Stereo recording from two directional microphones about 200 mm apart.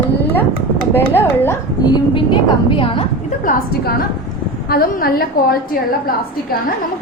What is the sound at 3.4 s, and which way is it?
A woman's voice, 50° left (ahead or behind).